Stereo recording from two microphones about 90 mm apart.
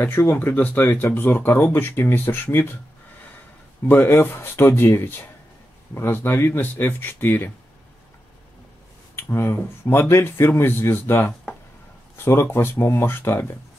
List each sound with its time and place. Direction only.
0.0 s speech: 25° left (ahead or behind)
3.9 s speech: 20° left (ahead or behind)
9.1 s speech: 25° left (ahead or behind)